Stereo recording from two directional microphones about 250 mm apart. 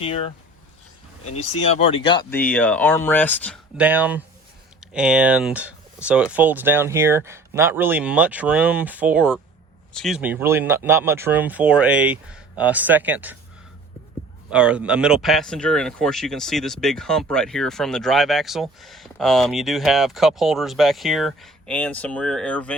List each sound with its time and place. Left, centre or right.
1.2 s speech: left
1.7 s speech: left
2.3 s speech: centre
14.5 s speech: centre